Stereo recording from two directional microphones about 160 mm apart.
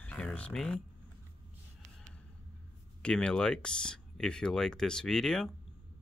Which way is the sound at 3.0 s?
5° left (ahead or behind).